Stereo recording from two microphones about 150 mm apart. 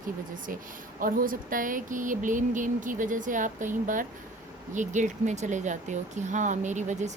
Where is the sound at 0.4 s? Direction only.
65° right (ahead or behind).